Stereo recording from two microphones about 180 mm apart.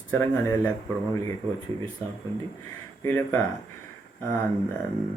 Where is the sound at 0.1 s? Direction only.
15° left (ahead or behind).